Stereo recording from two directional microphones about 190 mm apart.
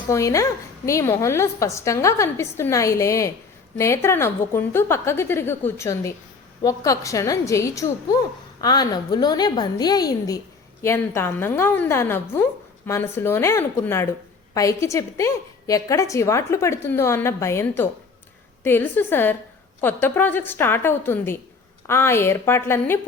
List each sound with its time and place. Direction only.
0.1 s a woman's voice: 15° left (ahead or behind)